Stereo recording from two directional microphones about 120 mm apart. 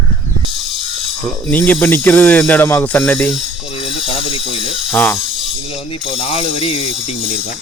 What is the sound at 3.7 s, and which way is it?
Mechanisms, 50° left (ahead or behind).